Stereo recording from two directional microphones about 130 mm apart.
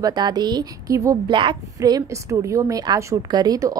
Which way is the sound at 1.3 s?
40° right (ahead or behind).